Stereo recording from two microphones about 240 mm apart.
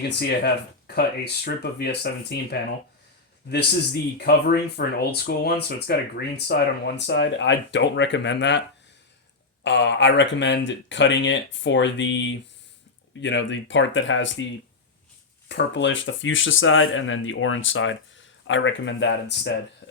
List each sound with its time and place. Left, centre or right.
0.2 s speech: left
4.2 s speech: left
9.6 s speech: left
15.4 s speech: left